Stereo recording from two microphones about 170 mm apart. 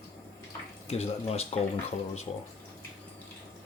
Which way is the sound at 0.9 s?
40° left (ahead or behind).